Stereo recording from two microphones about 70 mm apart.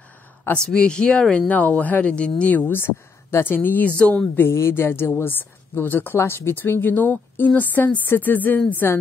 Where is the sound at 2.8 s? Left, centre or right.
Left.